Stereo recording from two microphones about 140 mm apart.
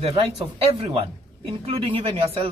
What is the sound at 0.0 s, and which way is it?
Speech, 45° right (ahead or behind).